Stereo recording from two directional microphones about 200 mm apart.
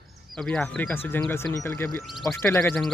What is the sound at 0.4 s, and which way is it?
Speech, 5° left (ahead or behind).